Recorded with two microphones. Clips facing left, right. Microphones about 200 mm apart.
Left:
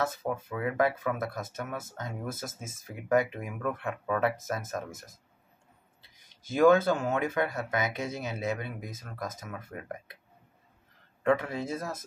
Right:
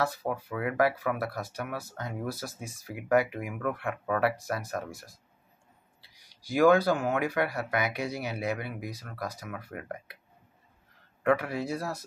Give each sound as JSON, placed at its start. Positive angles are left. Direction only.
{"t": 0.0, "sound": "speech", "side_deg": 20}
{"t": 11.2, "sound": "speech", "side_deg": 20}